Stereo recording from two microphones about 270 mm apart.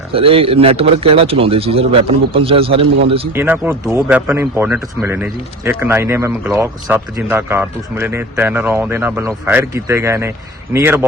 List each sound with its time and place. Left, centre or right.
0.1 s speech: right
3.3 s speech: centre